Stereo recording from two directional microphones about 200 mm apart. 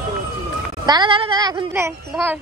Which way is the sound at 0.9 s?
25° right (ahead or behind).